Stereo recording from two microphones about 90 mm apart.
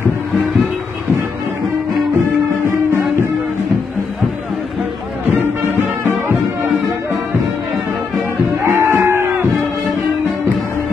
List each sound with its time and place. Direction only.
8.6 s crowd: 30° right (ahead or behind)